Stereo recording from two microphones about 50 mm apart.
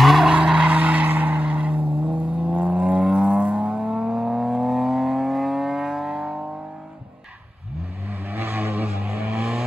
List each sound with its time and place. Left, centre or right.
0.0 s skidding: centre
0.3 s skidding: centre
0.7 s vehicle: right
1.0 s vehicle: right; by 6.3 s centre
8.3 s vehicle: right
8.8 s vehicle: centre